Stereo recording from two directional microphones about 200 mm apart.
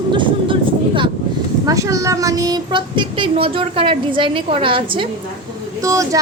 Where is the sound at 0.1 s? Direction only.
25° right (ahead or behind).